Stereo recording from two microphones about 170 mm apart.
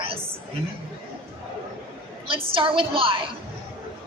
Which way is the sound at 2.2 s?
30° right (ahead or behind).